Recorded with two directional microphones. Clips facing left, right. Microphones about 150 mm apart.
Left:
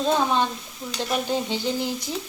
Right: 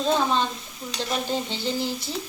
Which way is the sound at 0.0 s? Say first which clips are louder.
Left 1 dB; 15° left (ahead or behind).